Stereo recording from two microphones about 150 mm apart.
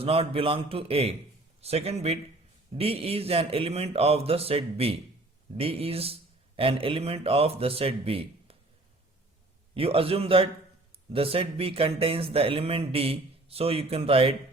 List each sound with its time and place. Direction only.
0.0 s speech: 40° right (ahead or behind)
9.7 s speech: 40° right (ahead or behind)